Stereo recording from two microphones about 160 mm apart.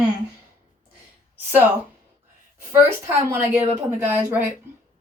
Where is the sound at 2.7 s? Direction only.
15° right (ahead or behind).